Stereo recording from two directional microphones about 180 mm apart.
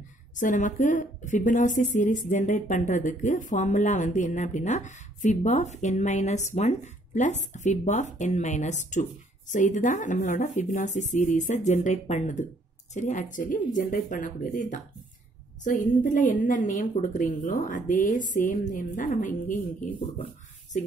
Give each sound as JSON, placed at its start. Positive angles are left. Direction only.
{"t": 0.4, "sound": "speech", "side_deg": 45}